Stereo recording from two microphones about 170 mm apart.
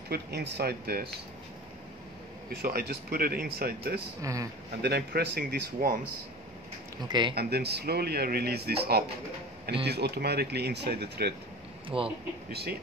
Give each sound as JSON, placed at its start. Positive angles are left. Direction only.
{"t": 0.1, "sound": "speech", "side_deg": -70}
{"t": 2.5, "sound": "speech", "side_deg": -65}
{"t": 4.2, "sound": "speech", "side_deg": -20}
{"t": 4.8, "sound": "speech", "side_deg": -70}
{"t": 7.1, "sound": "speech", "side_deg": -25}
{"t": 7.3, "sound": "speech", "side_deg": -70}
{"t": 11.9, "sound": "speech", "side_deg": -30}
{"t": 12.4, "sound": "speech", "side_deg": -70}